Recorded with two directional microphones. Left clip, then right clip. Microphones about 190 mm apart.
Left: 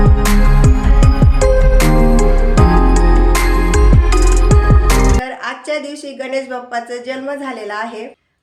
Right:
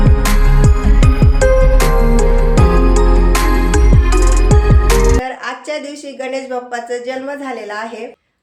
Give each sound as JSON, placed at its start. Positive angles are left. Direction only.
{"t": 0.2, "sound": "music", "side_deg": 0}
{"t": 6.3, "sound": "speech", "side_deg": 5}